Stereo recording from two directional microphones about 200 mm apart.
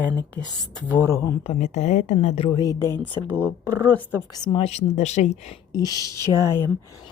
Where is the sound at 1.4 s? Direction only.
35° left (ahead or behind).